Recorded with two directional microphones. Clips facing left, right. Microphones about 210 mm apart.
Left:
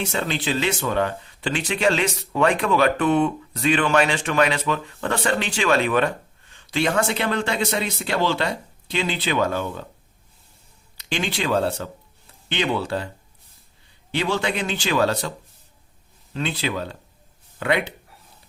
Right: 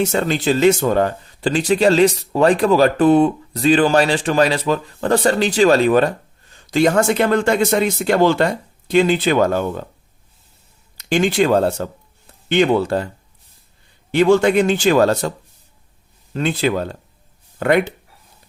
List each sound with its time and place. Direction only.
0.0 s speech: 45° right (ahead or behind)
10.9 s speech: 45° right (ahead or behind)
14.1 s speech: 45° right (ahead or behind)
16.3 s speech: 50° right (ahead or behind)